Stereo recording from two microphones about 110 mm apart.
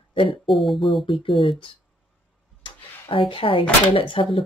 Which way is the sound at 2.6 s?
50° left (ahead or behind).